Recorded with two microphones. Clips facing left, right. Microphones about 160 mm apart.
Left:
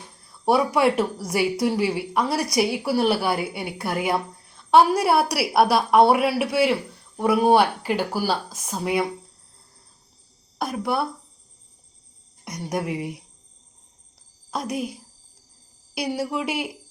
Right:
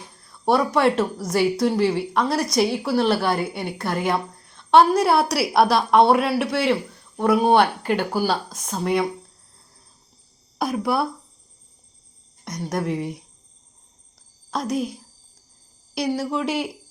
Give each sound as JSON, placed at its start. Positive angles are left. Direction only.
{"t": 0.4, "sound": "a woman's voice", "side_deg": 5}
{"t": 10.6, "sound": "speech", "side_deg": -5}
{"t": 12.5, "sound": "a woman's voice", "side_deg": 10}
{"t": 14.5, "sound": "a woman's voice", "side_deg": 5}
{"t": 16.0, "sound": "a woman's voice", "side_deg": 5}